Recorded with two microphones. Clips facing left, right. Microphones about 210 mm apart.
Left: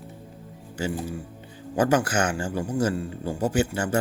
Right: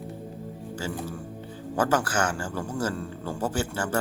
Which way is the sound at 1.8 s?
15° left (ahead or behind).